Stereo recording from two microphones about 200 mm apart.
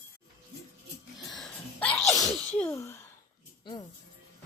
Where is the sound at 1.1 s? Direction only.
Centre (ahead or behind).